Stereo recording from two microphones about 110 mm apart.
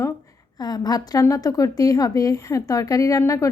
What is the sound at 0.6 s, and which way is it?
A woman's voice, 35° left (ahead or behind).